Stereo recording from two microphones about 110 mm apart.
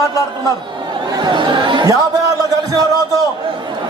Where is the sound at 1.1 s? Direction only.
40° right (ahead or behind).